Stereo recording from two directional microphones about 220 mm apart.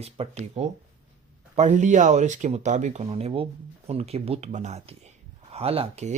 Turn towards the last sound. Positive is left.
turn(degrees=-30)  # may be behind; listen again after turning